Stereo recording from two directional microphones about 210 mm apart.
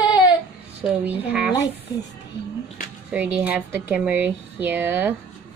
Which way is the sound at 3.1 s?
5° right (ahead or behind).